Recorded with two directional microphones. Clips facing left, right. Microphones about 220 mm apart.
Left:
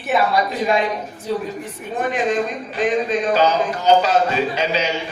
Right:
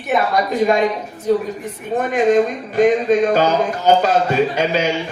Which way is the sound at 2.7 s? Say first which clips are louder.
Right 6 dB; 50° right (ahead or behind).